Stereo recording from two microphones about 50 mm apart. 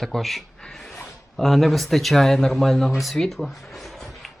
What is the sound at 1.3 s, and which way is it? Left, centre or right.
Speech, centre.